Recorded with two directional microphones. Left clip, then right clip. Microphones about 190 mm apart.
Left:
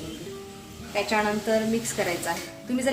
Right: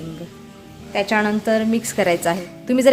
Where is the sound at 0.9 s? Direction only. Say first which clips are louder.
Right 5 dB; 60° right (ahead or behind).